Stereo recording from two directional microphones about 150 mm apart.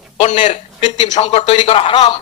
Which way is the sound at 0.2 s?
55° left (ahead or behind).